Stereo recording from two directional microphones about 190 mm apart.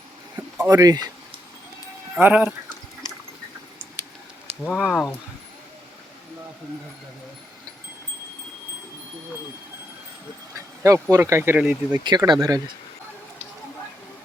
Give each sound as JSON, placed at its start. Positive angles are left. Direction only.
{"t": 0.7, "sound": "speech", "side_deg": -20}
{"t": 2.1, "sound": "speech", "side_deg": -10}
{"t": 4.8, "sound": "speech", "side_deg": 0}
{"t": 10.8, "sound": "speech", "side_deg": -15}
{"t": 12.0, "sound": "speech", "side_deg": -20}